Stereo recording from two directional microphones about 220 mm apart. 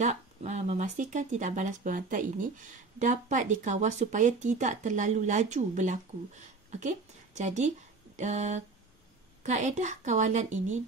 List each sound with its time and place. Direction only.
0.0 s speech: 30° right (ahead or behind)